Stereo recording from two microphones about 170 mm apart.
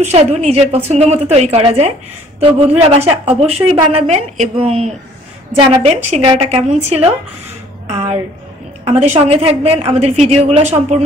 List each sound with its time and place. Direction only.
0.0 s a woman's voice: 40° right (ahead or behind)